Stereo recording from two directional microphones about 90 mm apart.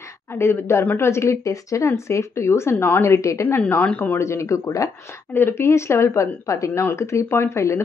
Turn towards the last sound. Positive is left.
turn(degrees=30)  # may be behind; listen again after turning